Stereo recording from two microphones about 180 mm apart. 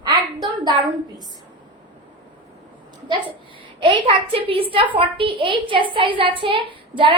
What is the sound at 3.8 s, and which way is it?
A woman's voice, 30° right (ahead or behind).